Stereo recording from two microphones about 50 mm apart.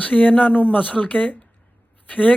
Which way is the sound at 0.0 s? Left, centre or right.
Left.